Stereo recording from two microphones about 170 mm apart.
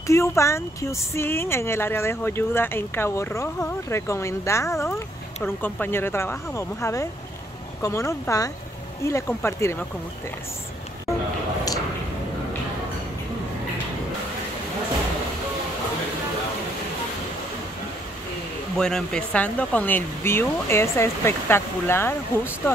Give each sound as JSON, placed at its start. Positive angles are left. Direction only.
{"t": 0.0, "sound": "speech", "side_deg": 15}
{"t": 18.8, "sound": "speech", "side_deg": 5}